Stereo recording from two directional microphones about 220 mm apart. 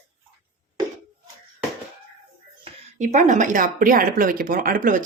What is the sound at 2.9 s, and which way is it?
A woman's voice, 35° right (ahead or behind).